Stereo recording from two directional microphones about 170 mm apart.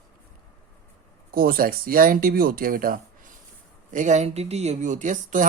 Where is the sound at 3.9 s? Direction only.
45° right (ahead or behind).